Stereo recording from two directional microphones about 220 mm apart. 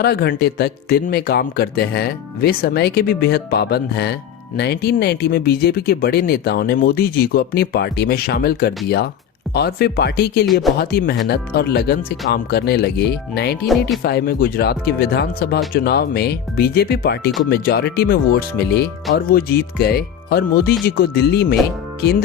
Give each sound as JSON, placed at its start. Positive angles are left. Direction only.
{"t": 0.0, "sound": "speech", "side_deg": 45}
{"t": 10.4, "sound": "speech", "side_deg": 0}
{"t": 10.8, "sound": "speech", "side_deg": 45}